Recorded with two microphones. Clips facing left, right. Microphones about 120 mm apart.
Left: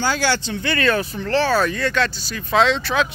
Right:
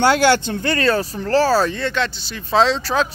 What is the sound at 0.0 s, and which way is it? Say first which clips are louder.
Speech: right 6 dB; 60° right (ahead or behind).